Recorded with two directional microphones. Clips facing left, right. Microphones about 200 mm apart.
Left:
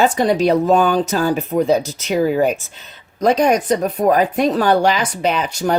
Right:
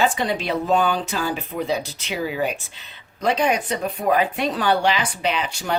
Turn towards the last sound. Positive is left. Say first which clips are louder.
# left 6 dB
turn(degrees=45)  # may be behind; listen again after turning